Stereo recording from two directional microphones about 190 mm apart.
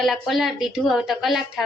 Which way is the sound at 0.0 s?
Centre (ahead or behind).